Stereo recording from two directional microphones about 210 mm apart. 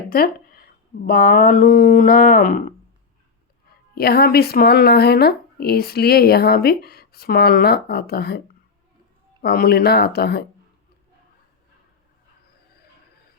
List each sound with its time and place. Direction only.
0.1 s speech: 45° left (ahead or behind)
3.9 s speech: 45° left (ahead or behind)
9.4 s speech: 45° left (ahead or behind)